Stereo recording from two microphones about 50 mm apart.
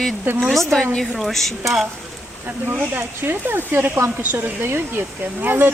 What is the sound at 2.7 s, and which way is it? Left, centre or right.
Speech, right.